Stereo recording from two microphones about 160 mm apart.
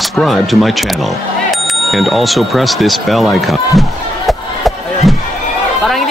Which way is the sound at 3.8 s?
Centre (ahead or behind).